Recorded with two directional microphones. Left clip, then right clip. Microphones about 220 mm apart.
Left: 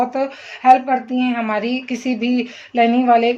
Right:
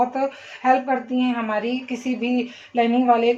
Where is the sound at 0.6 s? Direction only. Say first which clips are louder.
Left 7 dB; 45° left (ahead or behind).